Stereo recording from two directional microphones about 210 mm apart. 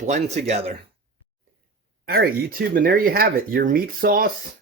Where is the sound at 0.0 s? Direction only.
35° right (ahead or behind).